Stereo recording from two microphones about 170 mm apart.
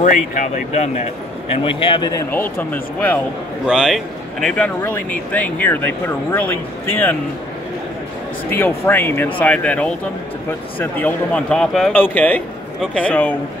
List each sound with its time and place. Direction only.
0.0 s speech: 45° left (ahead or behind)
1.6 s a man's voice: 30° left (ahead or behind); by 6.5 s 10° left (ahead or behind)
8.5 s speech: 10° left (ahead or behind)